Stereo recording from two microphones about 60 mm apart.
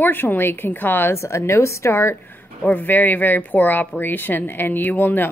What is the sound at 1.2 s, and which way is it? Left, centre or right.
Speech, left.